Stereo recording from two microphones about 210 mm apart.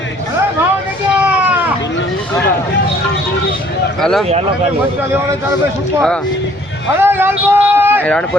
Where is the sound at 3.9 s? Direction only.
Centre (ahead or behind).